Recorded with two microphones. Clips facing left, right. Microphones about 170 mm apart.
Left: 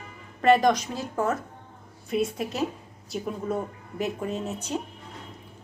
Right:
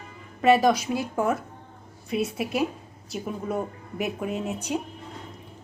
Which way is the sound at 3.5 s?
15° right (ahead or behind).